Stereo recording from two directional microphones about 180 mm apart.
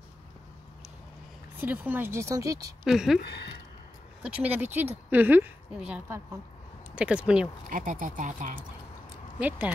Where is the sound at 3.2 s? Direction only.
65° left (ahead or behind).